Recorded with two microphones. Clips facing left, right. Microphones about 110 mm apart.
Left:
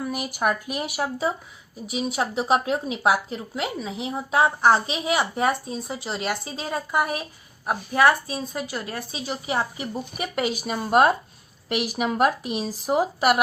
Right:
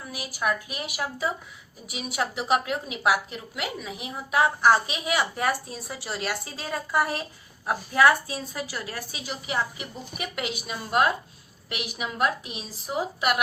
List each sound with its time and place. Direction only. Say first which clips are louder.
0.0 s a woman's voice: left 5 dB; 50° left (ahead or behind)